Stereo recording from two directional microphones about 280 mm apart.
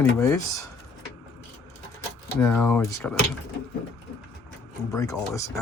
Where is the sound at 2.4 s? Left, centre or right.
Centre.